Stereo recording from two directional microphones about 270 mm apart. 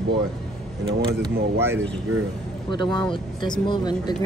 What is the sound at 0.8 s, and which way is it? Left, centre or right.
Speech, centre.